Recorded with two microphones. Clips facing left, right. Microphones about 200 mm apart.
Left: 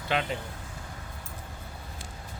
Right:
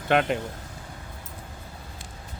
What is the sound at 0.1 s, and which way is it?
Speech, 60° right (ahead or behind).